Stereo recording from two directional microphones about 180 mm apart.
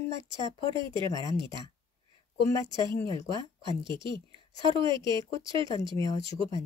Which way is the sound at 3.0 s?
30° right (ahead or behind).